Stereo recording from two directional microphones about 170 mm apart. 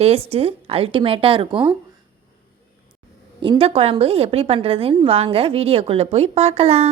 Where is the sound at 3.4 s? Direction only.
30° right (ahead or behind).